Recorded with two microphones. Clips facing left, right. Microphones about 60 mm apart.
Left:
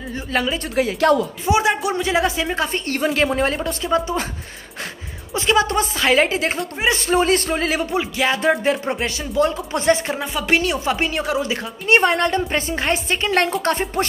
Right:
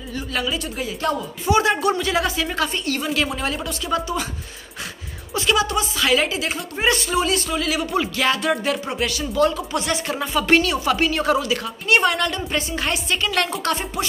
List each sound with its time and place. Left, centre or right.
0.7 s speech: left
1.4 s speech: centre
2.0 s speech: left
2.7 s a woman's voice: left
5.3 s a woman's voice: left
7.9 s speech: centre
8.4 s speech: left
9.2 s speech: centre
9.7 s speech: left
10.1 s speech: centre
10.6 s a woman's voice: left